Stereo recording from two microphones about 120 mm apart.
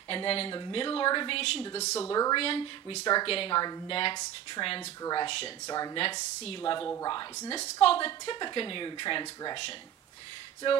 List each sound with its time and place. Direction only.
0.1 s a woman's voice: 50° left (ahead or behind)
1.8 s speech: 65° left (ahead or behind)
2.0 s speech: 30° left (ahead or behind)
2.3 s a woman's voice: 45° left (ahead or behind)
3.0 s speech: 35° left (ahead or behind)
3.3 s a woman's voice: 50° left (ahead or behind)
3.5 s speech: 35° left (ahead or behind)
6.4 s speech: 45° left (ahead or behind)
7.8 s a woman's voice: 50° left (ahead or behind)